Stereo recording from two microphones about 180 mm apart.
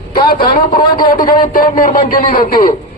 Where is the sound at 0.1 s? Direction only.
55° left (ahead or behind).